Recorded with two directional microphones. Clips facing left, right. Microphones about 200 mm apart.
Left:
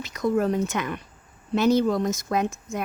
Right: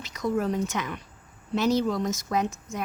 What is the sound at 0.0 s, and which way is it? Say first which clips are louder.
A woman's voice: left 4 dB; 55° left (ahead or behind).